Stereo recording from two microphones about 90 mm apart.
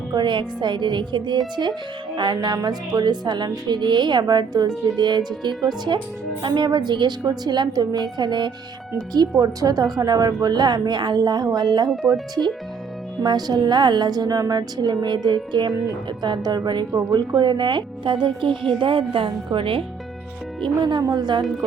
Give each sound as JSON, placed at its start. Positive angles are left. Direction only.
{"t": 0.1, "sound": "a woman's voice", "side_deg": -60}
{"t": 11.9, "sound": "speech", "side_deg": 0}
{"t": 13.2, "sound": "a woman's voice", "side_deg": -50}
{"t": 18.8, "sound": "a woman's voice", "side_deg": -75}
{"t": 20.6, "sound": "a woman's voice", "side_deg": -60}